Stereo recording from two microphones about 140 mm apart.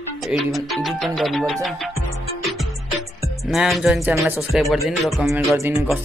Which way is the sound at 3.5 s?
Centre (ahead or behind).